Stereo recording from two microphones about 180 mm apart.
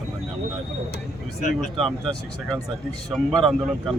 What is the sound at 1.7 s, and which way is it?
Speech, 5° left (ahead or behind).